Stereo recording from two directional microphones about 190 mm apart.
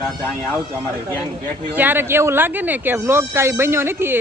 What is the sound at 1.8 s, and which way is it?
Speech, 10° right (ahead or behind).